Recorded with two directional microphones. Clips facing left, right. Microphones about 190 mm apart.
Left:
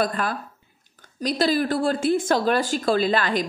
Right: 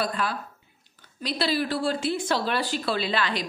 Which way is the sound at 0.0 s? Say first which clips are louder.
Left 4 dB; 50° left (ahead or behind).